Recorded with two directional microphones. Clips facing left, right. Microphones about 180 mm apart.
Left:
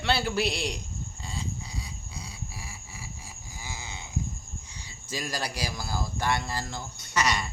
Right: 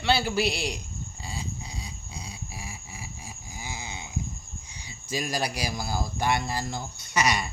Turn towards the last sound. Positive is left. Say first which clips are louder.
# right 2 dB
turn(degrees=-10)  # may be behind; listen again after turning